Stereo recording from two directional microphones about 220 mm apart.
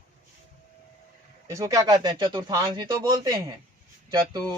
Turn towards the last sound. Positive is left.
turn(degrees=-15)  # may be behind; listen again after turning